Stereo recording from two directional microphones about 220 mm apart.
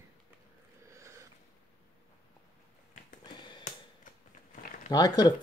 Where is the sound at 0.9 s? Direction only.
15° right (ahead or behind).